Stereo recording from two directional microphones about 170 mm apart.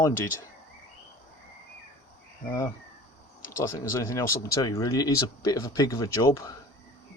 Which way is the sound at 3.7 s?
15° left (ahead or behind).